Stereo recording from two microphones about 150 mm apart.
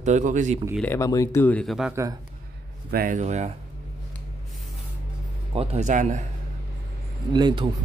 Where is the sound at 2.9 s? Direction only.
70° right (ahead or behind).